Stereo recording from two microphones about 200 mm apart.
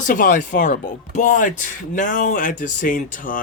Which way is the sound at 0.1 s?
40° left (ahead or behind).